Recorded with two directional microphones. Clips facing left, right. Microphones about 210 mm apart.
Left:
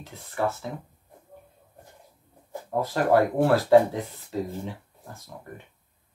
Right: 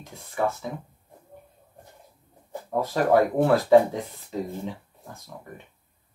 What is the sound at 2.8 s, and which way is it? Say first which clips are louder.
Speech: right 1 dB; 15° right (ahead or behind).